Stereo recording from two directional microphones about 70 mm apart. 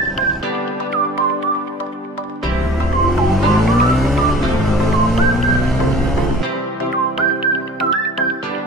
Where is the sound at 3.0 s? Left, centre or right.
Centre.